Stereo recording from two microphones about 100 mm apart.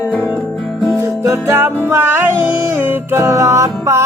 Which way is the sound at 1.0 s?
30° right (ahead or behind).